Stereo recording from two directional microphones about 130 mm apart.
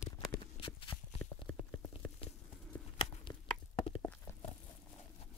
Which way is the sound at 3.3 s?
40° left (ahead or behind).